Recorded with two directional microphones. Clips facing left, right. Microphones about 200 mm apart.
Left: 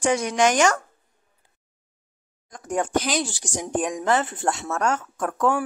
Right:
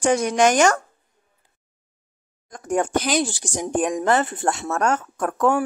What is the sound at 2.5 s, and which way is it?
Speech, 55° right (ahead or behind).